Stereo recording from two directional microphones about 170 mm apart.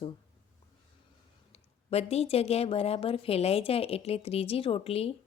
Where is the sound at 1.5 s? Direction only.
35° left (ahead or behind).